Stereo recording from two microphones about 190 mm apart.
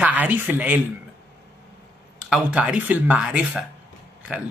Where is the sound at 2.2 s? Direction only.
5° right (ahead or behind).